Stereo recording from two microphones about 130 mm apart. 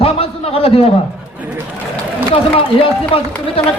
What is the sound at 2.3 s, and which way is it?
Speech, 45° left (ahead or behind).